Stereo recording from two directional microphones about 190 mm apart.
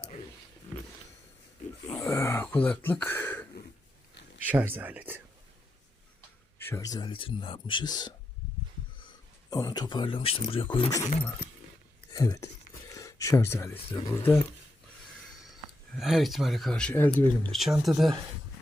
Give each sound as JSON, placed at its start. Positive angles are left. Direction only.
{"t": 0.0, "sound": "a sound", "side_deg": 30}
{"t": 2.0, "sound": "a sound", "side_deg": 15}
{"t": 4.4, "sound": "speech", "side_deg": -10}
{"t": 6.7, "sound": "speech", "side_deg": 15}
{"t": 9.5, "sound": "speech", "side_deg": 20}
{"t": 12.1, "sound": "speech", "side_deg": 20}
{"t": 13.7, "sound": "speech", "side_deg": 30}
{"t": 16.0, "sound": "speech", "side_deg": 0}